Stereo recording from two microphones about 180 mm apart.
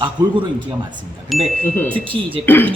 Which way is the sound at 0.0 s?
25° right (ahead or behind).